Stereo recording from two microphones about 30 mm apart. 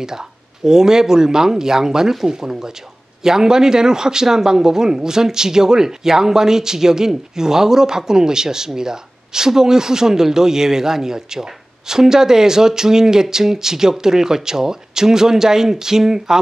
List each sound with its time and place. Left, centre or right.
0.7 s speech: centre